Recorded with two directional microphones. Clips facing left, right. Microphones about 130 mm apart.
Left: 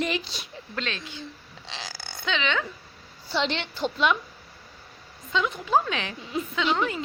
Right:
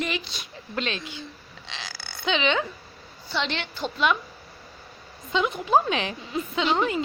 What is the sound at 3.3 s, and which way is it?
Speech, 30° left (ahead or behind).